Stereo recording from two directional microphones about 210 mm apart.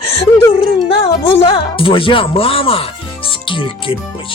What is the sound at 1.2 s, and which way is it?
Speech, 25° left (ahead or behind).